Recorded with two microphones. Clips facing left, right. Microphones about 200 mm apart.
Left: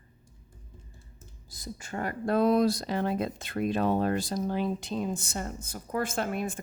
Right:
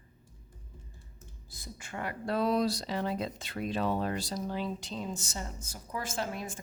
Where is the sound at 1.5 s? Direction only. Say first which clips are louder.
Left 5 dB; 40° left (ahead or behind); by 6.6 s 55° left (ahead or behind).